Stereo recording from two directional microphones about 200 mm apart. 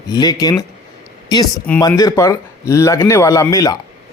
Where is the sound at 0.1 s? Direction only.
20° left (ahead or behind).